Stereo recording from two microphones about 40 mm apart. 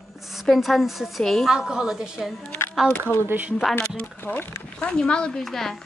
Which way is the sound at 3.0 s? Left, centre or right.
Right.